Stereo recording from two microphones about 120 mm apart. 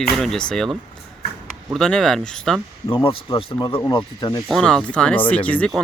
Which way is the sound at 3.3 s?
35° left (ahead or behind).